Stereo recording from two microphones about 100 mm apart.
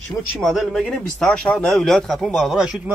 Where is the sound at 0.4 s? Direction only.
Centre (ahead or behind).